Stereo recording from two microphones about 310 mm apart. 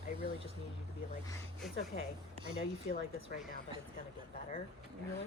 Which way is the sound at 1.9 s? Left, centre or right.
Left.